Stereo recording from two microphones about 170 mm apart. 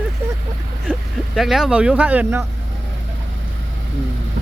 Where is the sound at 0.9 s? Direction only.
10° right (ahead or behind).